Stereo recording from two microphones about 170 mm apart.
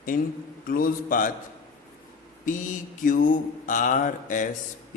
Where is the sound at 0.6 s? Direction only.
55° left (ahead or behind).